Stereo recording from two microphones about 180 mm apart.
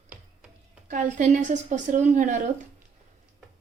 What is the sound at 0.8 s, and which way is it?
A woman's voice, 45° right (ahead or behind).